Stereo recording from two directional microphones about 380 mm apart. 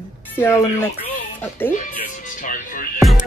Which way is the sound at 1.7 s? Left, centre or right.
Centre.